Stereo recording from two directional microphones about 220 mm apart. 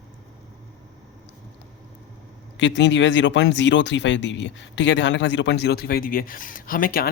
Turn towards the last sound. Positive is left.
turn(degrees=40)  # may be behind; listen again after turning